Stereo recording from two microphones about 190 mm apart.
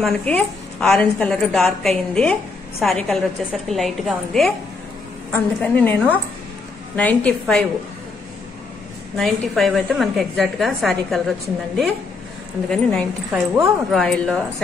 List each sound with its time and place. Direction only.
0.0 s a woman's voice: 5° left (ahead or behind)
9.1 s a woman's voice: centre (ahead or behind)